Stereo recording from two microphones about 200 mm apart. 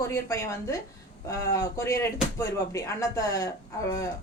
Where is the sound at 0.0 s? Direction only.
15° left (ahead or behind).